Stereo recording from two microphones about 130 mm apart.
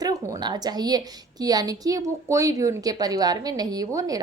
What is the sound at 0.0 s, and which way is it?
A woman's voice, 30° right (ahead or behind).